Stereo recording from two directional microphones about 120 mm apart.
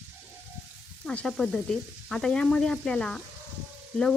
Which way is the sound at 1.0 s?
5° left (ahead or behind).